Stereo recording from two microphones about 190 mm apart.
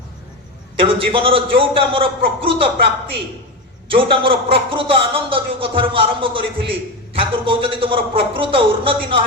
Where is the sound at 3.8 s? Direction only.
30° right (ahead or behind).